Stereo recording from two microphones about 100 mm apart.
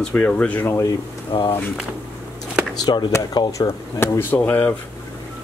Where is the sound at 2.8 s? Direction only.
50° left (ahead or behind).